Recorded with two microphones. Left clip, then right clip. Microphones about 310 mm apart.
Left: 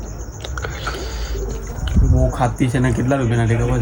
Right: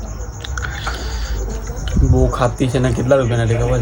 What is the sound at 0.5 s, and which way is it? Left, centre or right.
Biting, centre.